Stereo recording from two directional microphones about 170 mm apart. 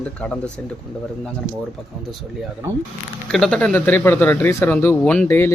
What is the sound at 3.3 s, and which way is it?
Speech, 5° left (ahead or behind).